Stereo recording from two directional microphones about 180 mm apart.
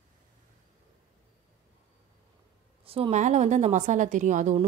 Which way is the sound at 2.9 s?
35° right (ahead or behind).